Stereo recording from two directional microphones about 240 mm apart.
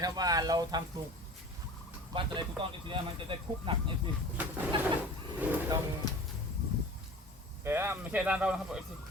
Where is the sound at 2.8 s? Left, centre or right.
Right.